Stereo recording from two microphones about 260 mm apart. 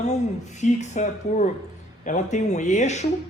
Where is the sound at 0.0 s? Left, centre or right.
Left.